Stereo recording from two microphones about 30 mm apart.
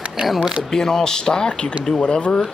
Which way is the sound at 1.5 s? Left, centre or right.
Left.